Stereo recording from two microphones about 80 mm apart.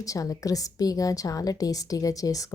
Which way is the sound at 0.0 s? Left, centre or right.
Left.